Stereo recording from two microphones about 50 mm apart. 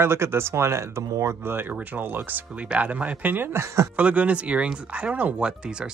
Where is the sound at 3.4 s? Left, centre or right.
Right.